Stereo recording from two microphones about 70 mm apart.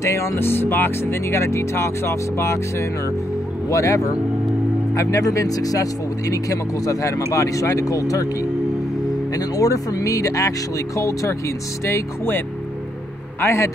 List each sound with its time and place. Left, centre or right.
0.0 s speech: left
13.4 s a man's voice: left